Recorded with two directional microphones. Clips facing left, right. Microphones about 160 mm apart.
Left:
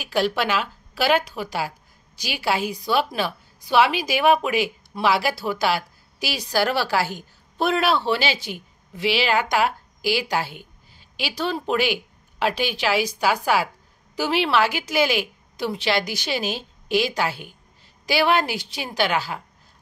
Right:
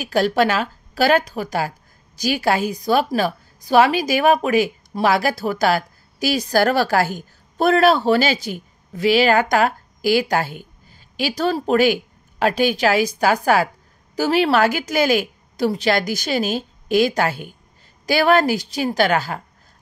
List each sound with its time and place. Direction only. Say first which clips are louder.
0.0 s a woman's voice: right 5 dB; 40° right (ahead or behind)